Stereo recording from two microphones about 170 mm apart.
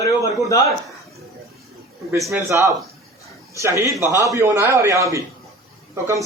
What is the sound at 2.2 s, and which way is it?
A man's voice, 15° right (ahead or behind).